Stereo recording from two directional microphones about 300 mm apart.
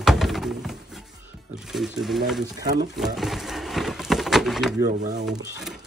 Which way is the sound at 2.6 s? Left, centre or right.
Centre.